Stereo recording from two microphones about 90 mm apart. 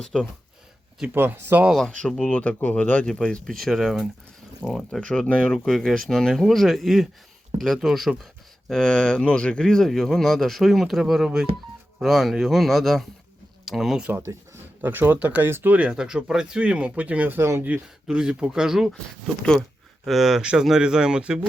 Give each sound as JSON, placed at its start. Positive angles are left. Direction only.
{"t": 0.0, "sound": "speech", "side_deg": 10}
{"t": 1.1, "sound": "speech", "side_deg": -25}
{"t": 1.7, "sound": "speech", "side_deg": 10}
{"t": 14.8, "sound": "speech", "side_deg": -20}
{"t": 17.7, "sound": "speech", "side_deg": -10}
{"t": 20.1, "sound": "speech", "side_deg": -5}